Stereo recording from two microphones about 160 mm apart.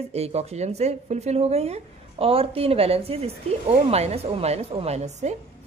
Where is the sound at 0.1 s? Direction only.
40° right (ahead or behind).